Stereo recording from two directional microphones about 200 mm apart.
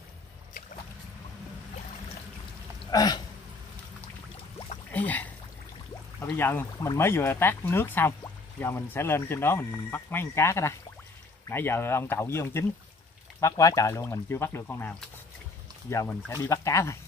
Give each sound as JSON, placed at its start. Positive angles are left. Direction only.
{"t": 2.8, "sound": "hiccup", "side_deg": 20}
{"t": 4.9, "sound": "a sound", "side_deg": 10}
{"t": 6.2, "sound": "speech", "side_deg": 10}